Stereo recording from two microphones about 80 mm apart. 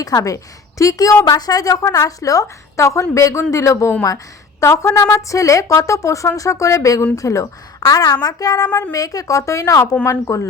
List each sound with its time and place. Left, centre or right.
0.0 s a woman's voice: left